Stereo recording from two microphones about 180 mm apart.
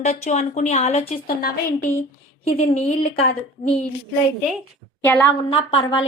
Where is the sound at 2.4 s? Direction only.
35° left (ahead or behind).